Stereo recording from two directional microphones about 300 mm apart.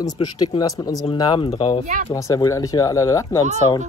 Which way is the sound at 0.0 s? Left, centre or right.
Centre.